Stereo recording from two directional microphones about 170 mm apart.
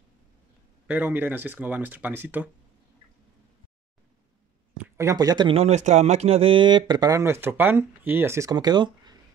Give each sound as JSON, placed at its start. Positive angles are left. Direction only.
{"t": 0.8, "sound": "speech", "side_deg": -10}
{"t": 4.8, "sound": "speech", "side_deg": -15}
{"t": 5.5, "sound": "speech", "side_deg": -40}